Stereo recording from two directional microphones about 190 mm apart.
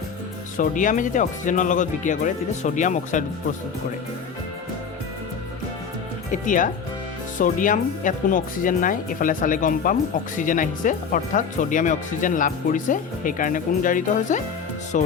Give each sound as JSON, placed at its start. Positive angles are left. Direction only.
{"t": 0.5, "sound": "speech", "side_deg": 45}
{"t": 6.3, "sound": "speech", "side_deg": 45}